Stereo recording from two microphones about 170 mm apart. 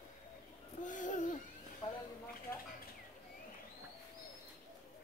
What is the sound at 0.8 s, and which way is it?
Hoot, 50° left (ahead or behind).